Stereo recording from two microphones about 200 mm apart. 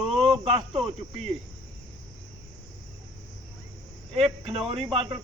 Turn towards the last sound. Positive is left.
turn(degrees=-25)  # may be behind; listen again after turning